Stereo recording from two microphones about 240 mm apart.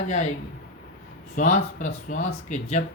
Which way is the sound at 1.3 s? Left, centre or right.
Left.